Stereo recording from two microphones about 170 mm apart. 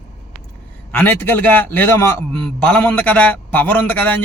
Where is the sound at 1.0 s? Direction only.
10° left (ahead or behind).